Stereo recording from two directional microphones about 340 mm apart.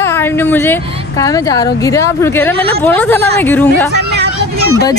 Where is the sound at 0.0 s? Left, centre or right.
Centre.